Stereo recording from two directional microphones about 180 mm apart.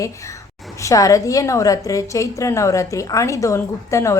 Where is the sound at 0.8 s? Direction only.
20° left (ahead or behind).